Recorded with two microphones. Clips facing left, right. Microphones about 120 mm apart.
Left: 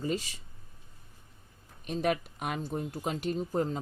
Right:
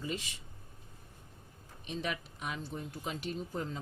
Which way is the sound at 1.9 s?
50° left (ahead or behind).